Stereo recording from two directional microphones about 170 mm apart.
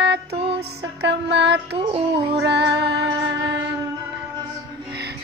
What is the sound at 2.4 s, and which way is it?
Music, 85° right.